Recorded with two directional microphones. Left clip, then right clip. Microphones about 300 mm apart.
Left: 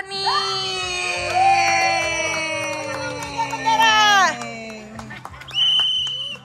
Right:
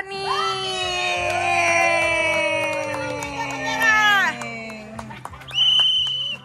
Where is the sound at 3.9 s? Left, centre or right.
Left.